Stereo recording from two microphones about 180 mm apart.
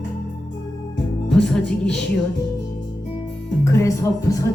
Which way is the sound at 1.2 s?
5° left (ahead or behind).